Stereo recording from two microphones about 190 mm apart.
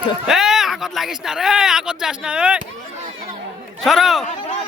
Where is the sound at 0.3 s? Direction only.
Centre (ahead or behind).